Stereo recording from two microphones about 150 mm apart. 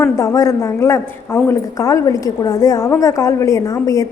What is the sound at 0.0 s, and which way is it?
A woman's voice, 20° left (ahead or behind).